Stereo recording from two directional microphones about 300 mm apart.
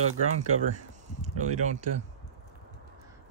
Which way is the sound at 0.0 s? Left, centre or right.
Right.